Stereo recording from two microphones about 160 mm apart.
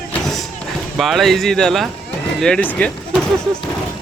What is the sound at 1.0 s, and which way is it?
Speech, centre (ahead or behind).